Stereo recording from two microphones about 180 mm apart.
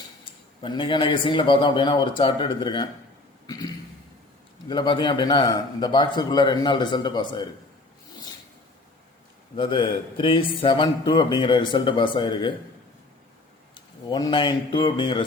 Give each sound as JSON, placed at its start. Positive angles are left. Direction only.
{"t": 0.6, "sound": "a man's voice", "side_deg": 25}
{"t": 3.4, "sound": "a sound", "side_deg": 20}
{"t": 4.7, "sound": "a man's voice", "side_deg": 25}
{"t": 9.6, "sound": "a man's voice", "side_deg": 25}
{"t": 13.7, "sound": "speech", "side_deg": 25}